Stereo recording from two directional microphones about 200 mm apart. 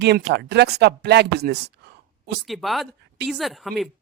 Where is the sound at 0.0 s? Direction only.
55° right (ahead or behind).